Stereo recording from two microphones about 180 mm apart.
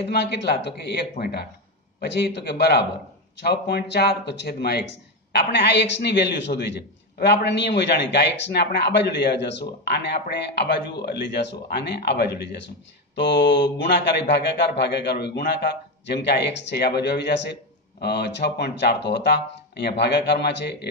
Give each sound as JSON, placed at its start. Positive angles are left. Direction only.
{"t": 0.1, "sound": "a man's voice", "side_deg": 70}